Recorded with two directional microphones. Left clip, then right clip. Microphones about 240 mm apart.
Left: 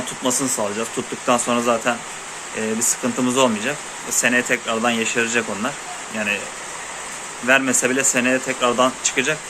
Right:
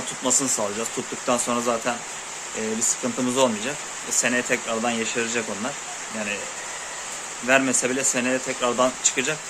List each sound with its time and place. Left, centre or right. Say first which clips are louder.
0.2 s speech: left 2 dB; centre
7.4 s speech: left 3 dB; centre